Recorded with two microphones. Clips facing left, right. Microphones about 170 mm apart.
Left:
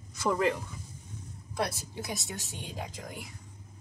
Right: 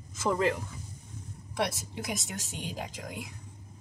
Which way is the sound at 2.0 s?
20° right (ahead or behind).